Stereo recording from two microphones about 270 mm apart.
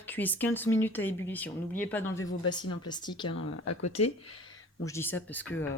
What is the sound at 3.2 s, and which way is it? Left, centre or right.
Speech, left.